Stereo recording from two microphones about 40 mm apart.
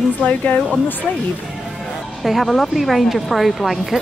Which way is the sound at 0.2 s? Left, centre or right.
Left.